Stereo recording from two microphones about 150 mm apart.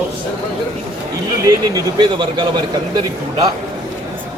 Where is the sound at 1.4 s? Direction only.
25° right (ahead or behind).